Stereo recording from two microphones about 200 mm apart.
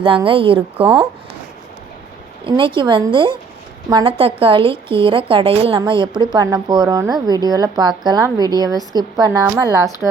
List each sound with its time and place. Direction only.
0.3 s a woman's voice: 25° right (ahead or behind)
2.4 s a woman's voice: 25° right (ahead or behind)